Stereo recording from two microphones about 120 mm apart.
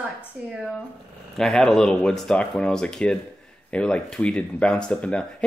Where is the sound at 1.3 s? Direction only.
5° left (ahead or behind).